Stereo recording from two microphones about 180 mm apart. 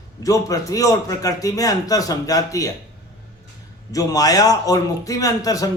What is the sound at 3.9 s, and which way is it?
A man's voice, 20° left (ahead or behind).